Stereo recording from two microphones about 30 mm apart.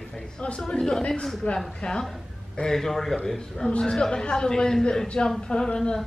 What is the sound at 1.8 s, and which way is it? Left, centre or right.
Speech, left.